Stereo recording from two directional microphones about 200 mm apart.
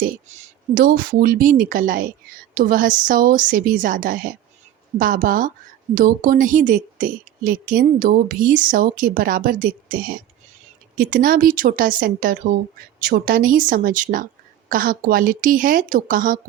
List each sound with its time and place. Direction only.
0.0 s a woman's voice: 40° right (ahead or behind)